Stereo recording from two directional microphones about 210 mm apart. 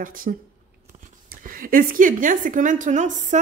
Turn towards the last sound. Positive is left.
turn(degrees=-35)  # may be behind; listen again after turning